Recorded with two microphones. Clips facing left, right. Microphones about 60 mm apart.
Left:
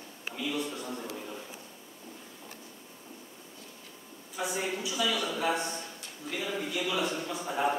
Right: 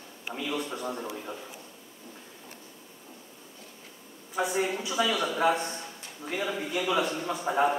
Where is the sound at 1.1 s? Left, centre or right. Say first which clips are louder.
Right 2 dB; centre.